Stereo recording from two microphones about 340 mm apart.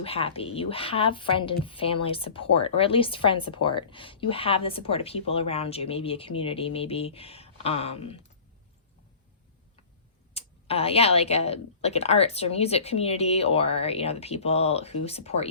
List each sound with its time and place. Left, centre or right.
0.0 s a woman's voice: centre
10.3 s a woman's voice: centre